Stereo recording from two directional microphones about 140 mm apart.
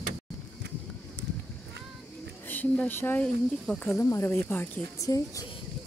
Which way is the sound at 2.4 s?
10° left (ahead or behind).